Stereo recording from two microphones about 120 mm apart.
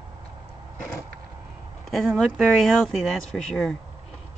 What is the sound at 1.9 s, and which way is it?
Speech, 5° right (ahead or behind).